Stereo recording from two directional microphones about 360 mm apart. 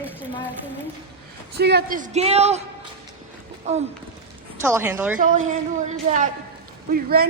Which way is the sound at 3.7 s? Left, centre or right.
Centre.